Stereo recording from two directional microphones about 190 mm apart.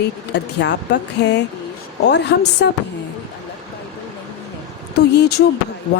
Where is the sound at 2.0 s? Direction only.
65° left (ahead or behind).